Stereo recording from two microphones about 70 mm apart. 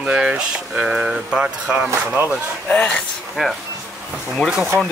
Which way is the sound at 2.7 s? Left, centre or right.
Centre.